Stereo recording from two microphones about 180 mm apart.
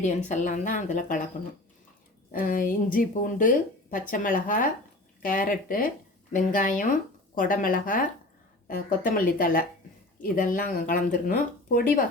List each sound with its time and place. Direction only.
0.3 s speech: 45° left (ahead or behind)
2.3 s speech: 50° left (ahead or behind)